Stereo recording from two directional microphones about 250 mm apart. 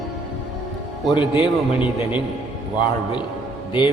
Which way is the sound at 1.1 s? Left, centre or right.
Centre.